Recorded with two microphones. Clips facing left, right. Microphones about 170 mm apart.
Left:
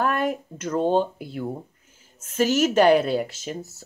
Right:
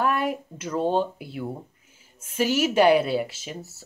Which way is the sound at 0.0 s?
45° left (ahead or behind).